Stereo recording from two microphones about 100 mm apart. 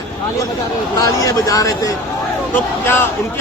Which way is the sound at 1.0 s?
35° left (ahead or behind).